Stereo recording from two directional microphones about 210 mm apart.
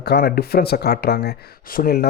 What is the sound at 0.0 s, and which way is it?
Speech, 50° left (ahead or behind).